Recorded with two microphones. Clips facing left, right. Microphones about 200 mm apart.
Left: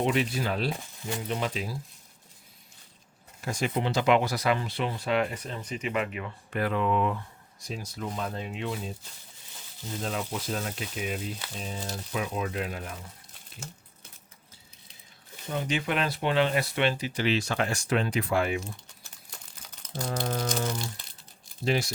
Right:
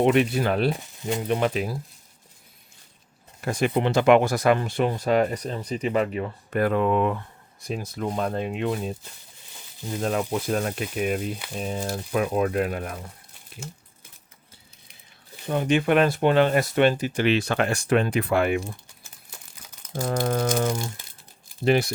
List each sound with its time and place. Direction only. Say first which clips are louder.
0.0 s speech: right 7 dB; 60° right (ahead or behind)
3.4 s speech: right 6 dB; 60° right (ahead or behind)
10.0 s speech: right 8 dB; 55° right (ahead or behind)
15.4 s speech: right 8 dB; 55° right (ahead or behind)
19.9 s speech: right 6 dB; 50° right (ahead or behind)